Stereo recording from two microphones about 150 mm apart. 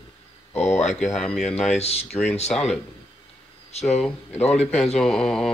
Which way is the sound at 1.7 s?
45° left (ahead or behind).